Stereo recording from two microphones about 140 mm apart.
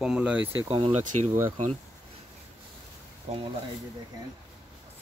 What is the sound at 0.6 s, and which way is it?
Speech, 40° right (ahead or behind).